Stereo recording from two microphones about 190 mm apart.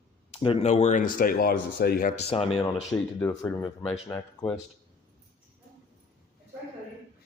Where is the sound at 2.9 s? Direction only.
10° left (ahead or behind).